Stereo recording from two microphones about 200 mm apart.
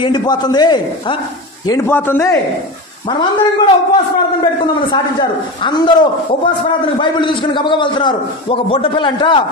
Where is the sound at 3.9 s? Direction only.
25° left (ahead or behind).